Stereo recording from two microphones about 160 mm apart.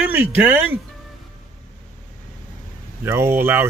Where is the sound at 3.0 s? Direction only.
15° right (ahead or behind).